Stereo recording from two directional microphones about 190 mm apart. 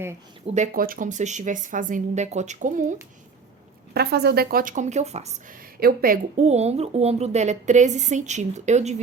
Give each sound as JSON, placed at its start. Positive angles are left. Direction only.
{"t": 0.4, "sound": "speech", "side_deg": -40}
{"t": 3.9, "sound": "a woman's voice", "side_deg": -60}
{"t": 5.8, "sound": "speech", "side_deg": -50}